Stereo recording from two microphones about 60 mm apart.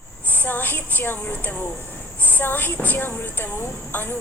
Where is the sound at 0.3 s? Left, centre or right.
Left.